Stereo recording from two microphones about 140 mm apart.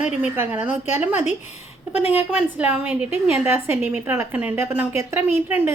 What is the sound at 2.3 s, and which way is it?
A woman's voice, 10° right (ahead or behind).